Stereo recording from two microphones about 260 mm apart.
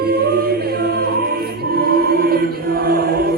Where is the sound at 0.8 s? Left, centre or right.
Right.